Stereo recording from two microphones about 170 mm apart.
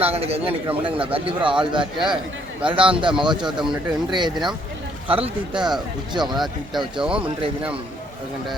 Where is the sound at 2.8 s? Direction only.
30° right (ahead or behind).